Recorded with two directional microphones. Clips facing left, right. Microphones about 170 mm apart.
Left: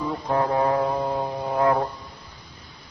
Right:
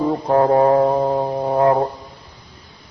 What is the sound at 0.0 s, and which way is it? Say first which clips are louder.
Music: right 8 dB; 45° right (ahead or behind).